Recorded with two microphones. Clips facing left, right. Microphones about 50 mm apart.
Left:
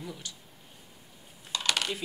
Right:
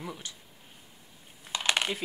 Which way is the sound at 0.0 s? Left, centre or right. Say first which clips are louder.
Right 1 dB; right.